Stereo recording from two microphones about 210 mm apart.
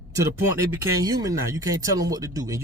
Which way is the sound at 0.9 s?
15° right (ahead or behind).